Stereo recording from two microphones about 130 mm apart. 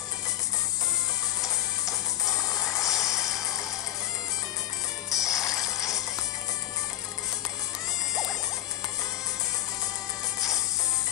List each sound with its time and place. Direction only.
1.4 s music: 25° left (ahead or behind)
2.7 s vehicle: 25° left (ahead or behind)
3.0 s a sound: 5° right (ahead or behind)
5.1 s music: 25° left (ahead or behind)